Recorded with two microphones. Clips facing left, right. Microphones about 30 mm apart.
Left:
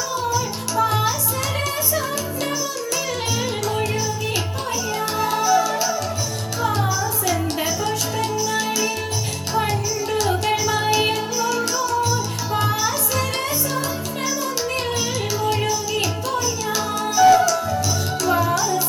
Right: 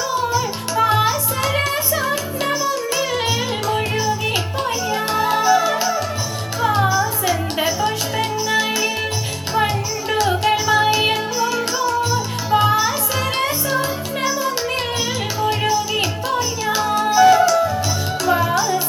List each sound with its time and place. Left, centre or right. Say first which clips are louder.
0.3 s music: right 2 dB; right
4.9 s music: right 3 dB; right
10.1 s music: right 4 dB; right
15.4 s music: right 4 dB; right